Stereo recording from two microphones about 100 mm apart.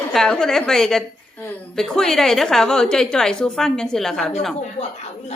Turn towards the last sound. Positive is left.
turn(degrees=5)  # may be behind; listen again after turning